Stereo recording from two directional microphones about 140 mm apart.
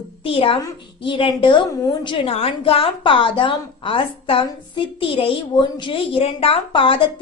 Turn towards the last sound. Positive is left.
turn(degrees=40)  # may be behind; listen again after turning